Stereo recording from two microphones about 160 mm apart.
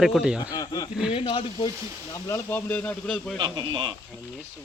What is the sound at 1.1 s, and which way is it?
Speech, 35° left (ahead or behind).